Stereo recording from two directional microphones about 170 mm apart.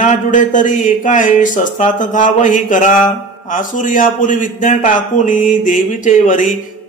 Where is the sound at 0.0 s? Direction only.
50° left (ahead or behind).